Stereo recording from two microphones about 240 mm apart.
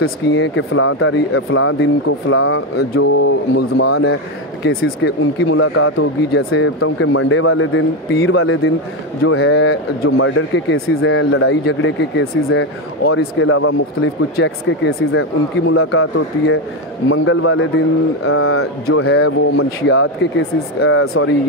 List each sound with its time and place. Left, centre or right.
0.0 s speech: left
3.8 s speech: left
17.1 s speech: left